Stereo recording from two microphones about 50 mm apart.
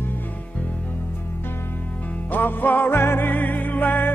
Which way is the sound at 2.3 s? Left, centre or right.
Left.